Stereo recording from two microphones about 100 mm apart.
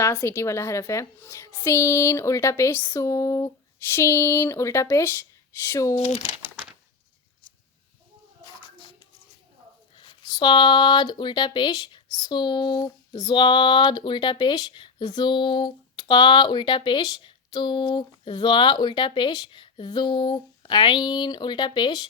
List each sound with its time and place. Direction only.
0.0 s a woman's voice: 30° left (ahead or behind)
10.0 s speech: 50° left (ahead or behind)